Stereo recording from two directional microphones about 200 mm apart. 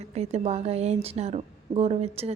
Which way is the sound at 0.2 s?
30° right (ahead or behind).